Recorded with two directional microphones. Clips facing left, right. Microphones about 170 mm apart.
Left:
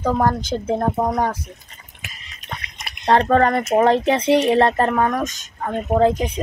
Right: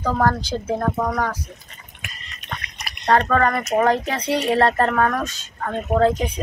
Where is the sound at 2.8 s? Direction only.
25° left (ahead or behind).